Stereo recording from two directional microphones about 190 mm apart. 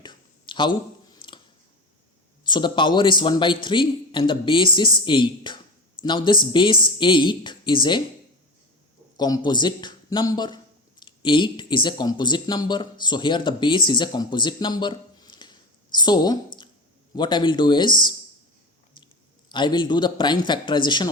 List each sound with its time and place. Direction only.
0.0 s a sound: 25° left (ahead or behind)
2.5 s a man's voice: 25° left (ahead or behind)
9.1 s a man's voice: 20° left (ahead or behind)
19.5 s a man's voice: 25° left (ahead or behind)